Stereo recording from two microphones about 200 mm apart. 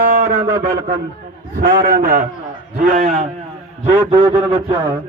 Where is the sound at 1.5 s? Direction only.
50° right (ahead or behind).